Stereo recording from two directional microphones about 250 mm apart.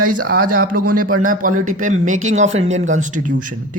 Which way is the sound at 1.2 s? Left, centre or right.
Right.